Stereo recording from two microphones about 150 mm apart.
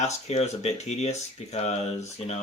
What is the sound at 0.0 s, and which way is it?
Speech, 45° left (ahead or behind).